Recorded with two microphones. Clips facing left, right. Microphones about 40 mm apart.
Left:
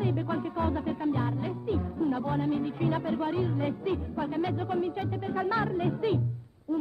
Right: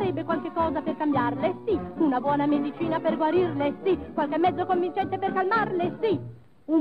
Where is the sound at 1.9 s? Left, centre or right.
Right.